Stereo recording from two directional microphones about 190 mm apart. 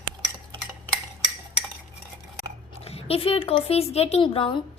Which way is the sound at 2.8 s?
30° left (ahead or behind).